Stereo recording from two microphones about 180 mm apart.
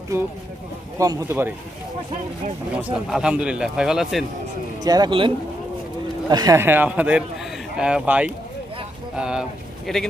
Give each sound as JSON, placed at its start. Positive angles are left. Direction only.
{"t": 0.1, "sound": "a man's voice", "side_deg": -15}
{"t": 2.7, "sound": "speech", "side_deg": -5}
{"t": 4.8, "sound": "a man's voice", "side_deg": -20}